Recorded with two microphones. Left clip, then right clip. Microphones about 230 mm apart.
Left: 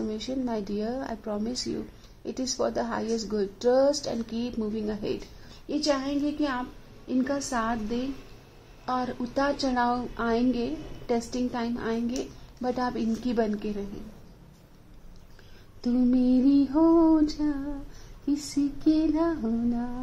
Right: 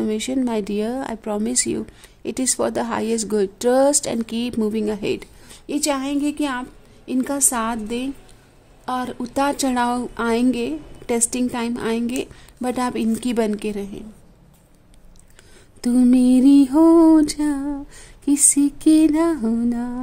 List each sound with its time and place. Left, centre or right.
0.0 s speech: right
15.8 s speech: right